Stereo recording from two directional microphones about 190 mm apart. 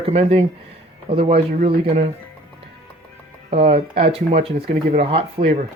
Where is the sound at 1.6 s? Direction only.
50° right (ahead or behind).